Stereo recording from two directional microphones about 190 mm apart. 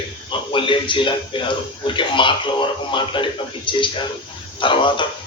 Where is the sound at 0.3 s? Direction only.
25° left (ahead or behind).